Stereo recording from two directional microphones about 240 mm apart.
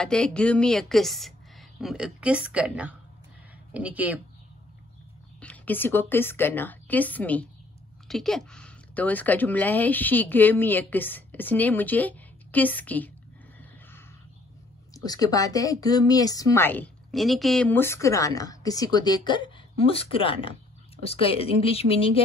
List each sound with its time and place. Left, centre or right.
0.0 s a woman's voice: centre
5.4 s a woman's voice: centre
15.0 s a woman's voice: centre